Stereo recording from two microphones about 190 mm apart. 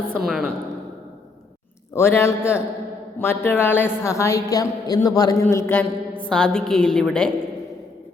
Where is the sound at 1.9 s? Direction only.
15° left (ahead or behind).